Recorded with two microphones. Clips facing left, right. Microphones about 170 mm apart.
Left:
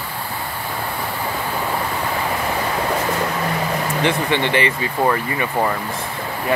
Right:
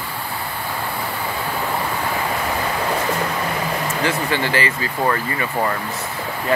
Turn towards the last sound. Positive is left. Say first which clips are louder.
# left 2 dB
turn(degrees=15)  # may be behind; listen again after turning